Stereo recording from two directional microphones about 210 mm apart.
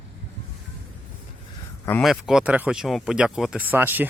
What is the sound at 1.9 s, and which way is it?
Speech, 5° left (ahead or behind).